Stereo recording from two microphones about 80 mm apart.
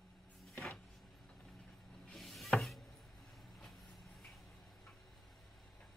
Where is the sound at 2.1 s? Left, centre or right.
Centre.